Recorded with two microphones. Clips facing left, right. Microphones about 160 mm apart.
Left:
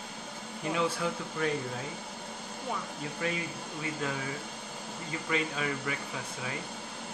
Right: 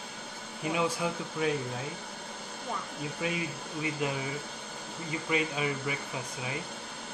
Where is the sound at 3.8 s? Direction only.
15° right (ahead or behind).